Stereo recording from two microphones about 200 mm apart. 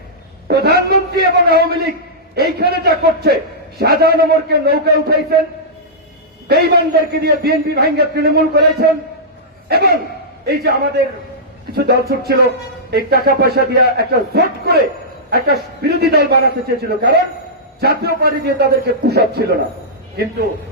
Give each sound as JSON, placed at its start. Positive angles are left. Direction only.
{"t": 0.4, "sound": "a sound", "side_deg": -55}
{"t": 2.3, "sound": "a man's voice", "side_deg": -50}
{"t": 6.5, "sound": "a man's voice", "side_deg": -50}